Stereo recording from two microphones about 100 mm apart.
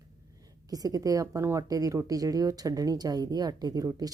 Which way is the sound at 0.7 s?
40° right (ahead or behind).